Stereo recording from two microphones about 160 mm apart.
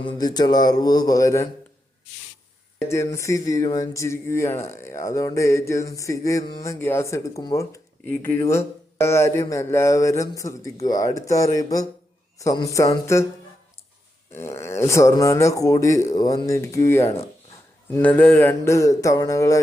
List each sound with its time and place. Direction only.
0.0 s speech: 25° left (ahead or behind)
2.9 s speech: 20° left (ahead or behind)
14.3 s speech: 15° left (ahead or behind)
18.2 s speech: 10° left (ahead or behind)